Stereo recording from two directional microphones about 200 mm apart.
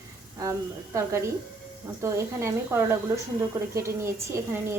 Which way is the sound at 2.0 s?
15° right (ahead or behind).